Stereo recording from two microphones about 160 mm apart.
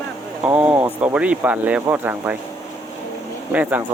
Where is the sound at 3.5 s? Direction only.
10° right (ahead or behind).